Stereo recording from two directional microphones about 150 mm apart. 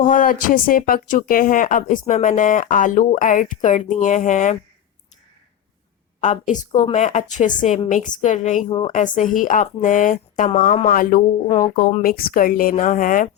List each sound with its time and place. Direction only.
0.0 s speech: 65° left (ahead or behind)
6.1 s a woman's voice: 50° left (ahead or behind); by 11.2 s 65° left (ahead or behind)
11.4 s speech: 30° left (ahead or behind)
12.0 s speech: 75° left (ahead or behind)